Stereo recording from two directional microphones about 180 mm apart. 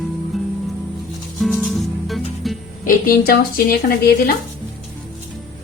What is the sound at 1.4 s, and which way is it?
Music, centre (ahead or behind).